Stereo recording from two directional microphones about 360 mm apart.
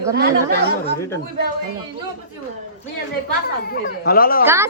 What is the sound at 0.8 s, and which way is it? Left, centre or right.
Speech, centre.